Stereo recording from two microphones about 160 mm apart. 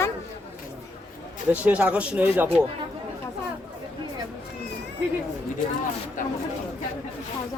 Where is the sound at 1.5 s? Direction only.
10° right (ahead or behind).